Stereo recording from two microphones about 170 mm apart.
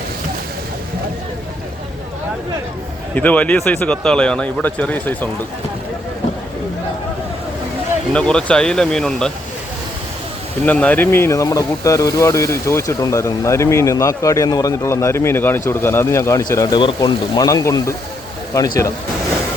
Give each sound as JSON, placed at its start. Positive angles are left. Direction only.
{"t": 3.2, "sound": "speech", "side_deg": 10}
{"t": 8.1, "sound": "speech", "side_deg": 5}
{"t": 10.7, "sound": "speech", "side_deg": 10}